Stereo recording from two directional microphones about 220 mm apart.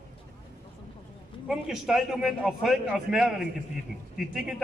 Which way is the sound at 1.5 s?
Centre (ahead or behind).